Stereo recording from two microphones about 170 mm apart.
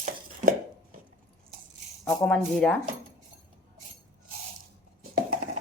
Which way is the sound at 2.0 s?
5° left (ahead or behind).